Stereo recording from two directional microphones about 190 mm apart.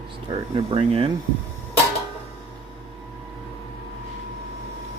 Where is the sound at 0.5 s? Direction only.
30° right (ahead or behind).